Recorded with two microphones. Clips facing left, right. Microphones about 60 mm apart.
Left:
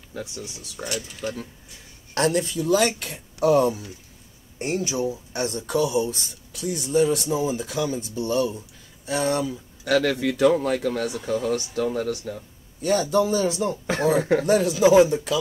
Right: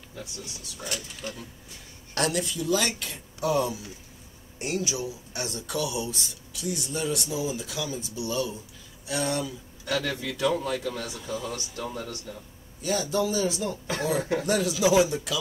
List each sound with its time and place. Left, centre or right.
2.1 s speech: left
4.6 s speech: left
5.3 s speech: left
9.8 s speech: left
10.4 s speech: left
12.8 s speech: left
14.4 s speech: left